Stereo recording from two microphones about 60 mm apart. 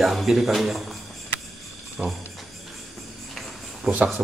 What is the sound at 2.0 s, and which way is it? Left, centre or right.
Speech, centre.